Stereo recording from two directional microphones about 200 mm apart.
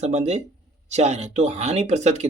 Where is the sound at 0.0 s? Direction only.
35° right (ahead or behind).